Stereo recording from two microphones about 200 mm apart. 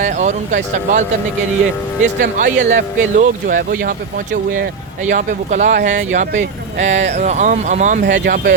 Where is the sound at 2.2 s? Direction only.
40° right (ahead or behind).